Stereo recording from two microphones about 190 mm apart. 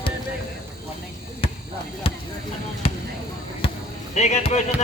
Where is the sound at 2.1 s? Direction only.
30° left (ahead or behind).